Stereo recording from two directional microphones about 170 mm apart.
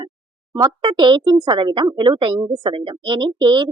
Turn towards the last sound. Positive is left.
turn(degrees=-25)  # may be behind; listen again after turning